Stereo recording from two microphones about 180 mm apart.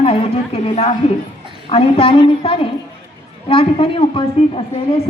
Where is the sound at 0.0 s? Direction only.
30° left (ahead or behind).